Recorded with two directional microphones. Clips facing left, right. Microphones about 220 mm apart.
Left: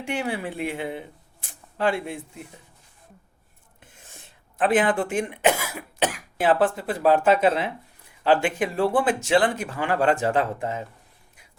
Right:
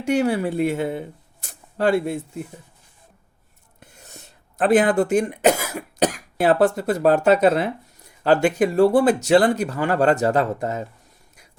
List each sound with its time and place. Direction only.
0.0 s speech: 40° right (ahead or behind)
3.8 s speech: 40° right (ahead or behind)